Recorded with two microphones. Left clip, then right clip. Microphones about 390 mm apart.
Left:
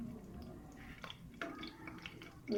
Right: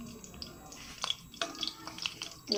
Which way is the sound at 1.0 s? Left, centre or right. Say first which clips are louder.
Right 12 dB; right.